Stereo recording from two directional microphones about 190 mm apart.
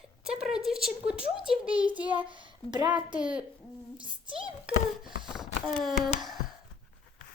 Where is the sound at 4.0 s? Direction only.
25° right (ahead or behind).